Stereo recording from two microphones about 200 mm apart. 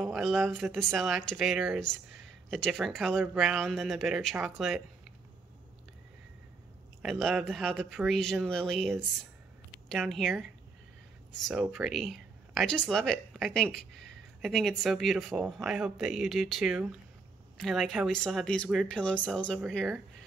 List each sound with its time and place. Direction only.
0.0 s speech: centre (ahead or behind)
7.0 s speech: centre (ahead or behind)
11.4 s speech: 5° right (ahead or behind)